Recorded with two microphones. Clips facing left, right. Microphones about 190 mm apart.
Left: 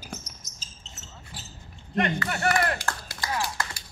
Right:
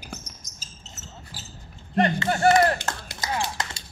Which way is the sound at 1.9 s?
35° right (ahead or behind).